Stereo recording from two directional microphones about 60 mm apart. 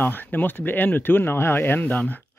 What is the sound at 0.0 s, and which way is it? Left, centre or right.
Speech, left.